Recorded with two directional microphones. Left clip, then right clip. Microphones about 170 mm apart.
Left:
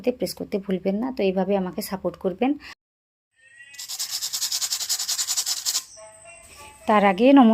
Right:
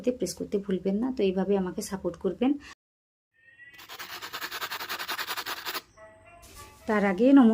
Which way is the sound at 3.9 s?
45° right (ahead or behind).